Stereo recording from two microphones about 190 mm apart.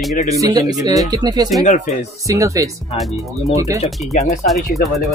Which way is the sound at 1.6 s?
40° left (ahead or behind).